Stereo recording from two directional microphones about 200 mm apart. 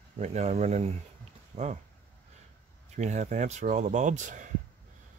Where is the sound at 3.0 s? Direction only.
35° right (ahead or behind).